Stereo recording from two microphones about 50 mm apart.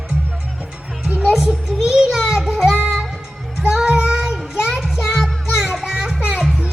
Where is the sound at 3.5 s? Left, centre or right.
Centre.